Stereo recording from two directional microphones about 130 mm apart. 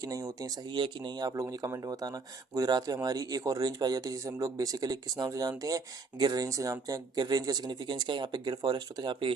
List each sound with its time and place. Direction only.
0.0 s speech: 25° right (ahead or behind)